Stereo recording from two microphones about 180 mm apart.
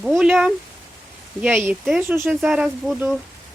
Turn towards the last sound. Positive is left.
turn(degrees=-5)  # may be behind; listen again after turning